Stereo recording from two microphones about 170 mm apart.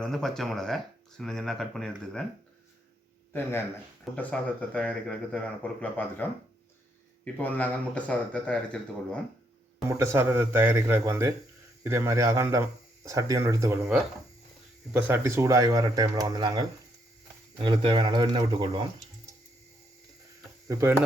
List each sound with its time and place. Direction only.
0.0 s speech: centre (ahead or behind)
4.1 s speech: 5° left (ahead or behind)
7.4 s speech: 10° left (ahead or behind)
9.9 s speech: 15° right (ahead or behind)
14.9 s speech: 10° right (ahead or behind); by 18.8 s 30° right (ahead or behind)